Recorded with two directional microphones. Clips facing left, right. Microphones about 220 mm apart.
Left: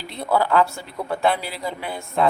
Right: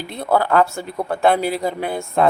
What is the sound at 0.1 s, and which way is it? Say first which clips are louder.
A woman's voice: right 2 dB; 50° right (ahead or behind).